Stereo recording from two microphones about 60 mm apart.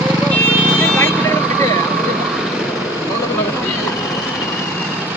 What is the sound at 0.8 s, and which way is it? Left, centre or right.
Vehicle, left.